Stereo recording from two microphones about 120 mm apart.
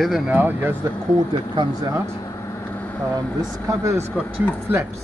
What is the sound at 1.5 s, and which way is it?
Speech, 35° right (ahead or behind).